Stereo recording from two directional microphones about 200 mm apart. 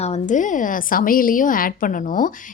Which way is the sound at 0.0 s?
35° left (ahead or behind).